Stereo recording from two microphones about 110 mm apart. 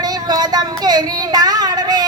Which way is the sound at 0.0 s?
35° right (ahead or behind).